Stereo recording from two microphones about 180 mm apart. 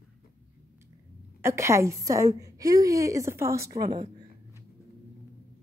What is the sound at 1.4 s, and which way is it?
A woman's voice, 15° right (ahead or behind).